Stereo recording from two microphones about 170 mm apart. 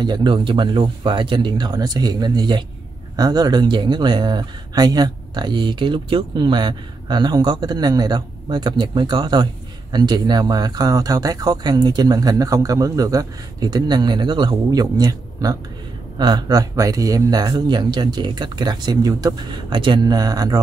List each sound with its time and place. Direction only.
0.0 s speech: 25° right (ahead or behind)